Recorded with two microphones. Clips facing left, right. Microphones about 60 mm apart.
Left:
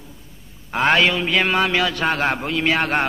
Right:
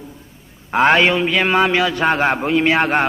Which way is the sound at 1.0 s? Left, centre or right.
Centre.